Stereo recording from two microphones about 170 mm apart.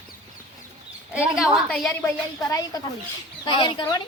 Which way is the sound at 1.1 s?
5° right (ahead or behind).